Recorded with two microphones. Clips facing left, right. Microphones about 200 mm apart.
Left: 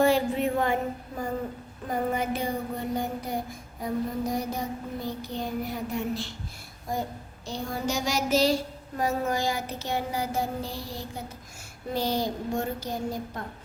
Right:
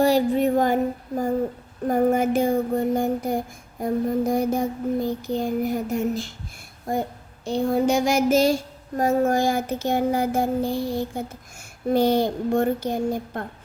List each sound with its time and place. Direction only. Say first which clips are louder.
0.0 s a sound: right 4 dB; 40° right (ahead or behind)
1.9 s child singing: right 8 dB; 45° right (ahead or behind)
7.4 s speech: right 10 dB; 55° right (ahead or behind)
9.0 s child singing: right 7 dB; 50° right (ahead or behind)
11.9 s speech: right 8 dB; 55° right (ahead or behind)